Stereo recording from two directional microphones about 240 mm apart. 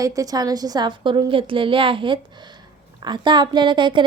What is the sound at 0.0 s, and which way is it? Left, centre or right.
A woman's voice, centre.